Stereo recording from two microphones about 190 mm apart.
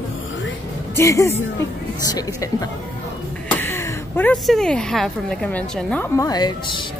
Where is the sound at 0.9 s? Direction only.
15° left (ahead or behind).